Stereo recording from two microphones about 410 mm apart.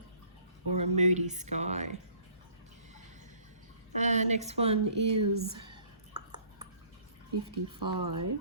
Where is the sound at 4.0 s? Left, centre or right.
Centre.